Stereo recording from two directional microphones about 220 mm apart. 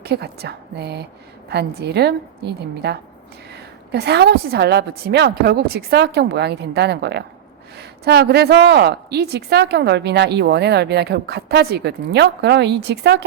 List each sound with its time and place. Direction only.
0.0 s a woman's voice: 50° right (ahead or behind)